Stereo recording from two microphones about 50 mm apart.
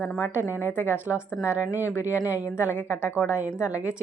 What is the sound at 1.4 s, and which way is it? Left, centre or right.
A woman's voice, right.